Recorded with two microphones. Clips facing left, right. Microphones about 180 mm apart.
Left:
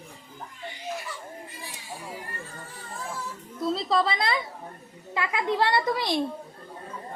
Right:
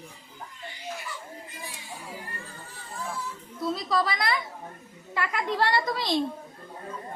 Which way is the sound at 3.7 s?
25° left (ahead or behind).